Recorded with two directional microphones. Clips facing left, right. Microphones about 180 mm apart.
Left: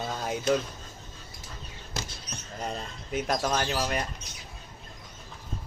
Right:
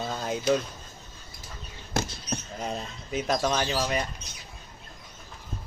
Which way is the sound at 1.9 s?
55° right (ahead or behind).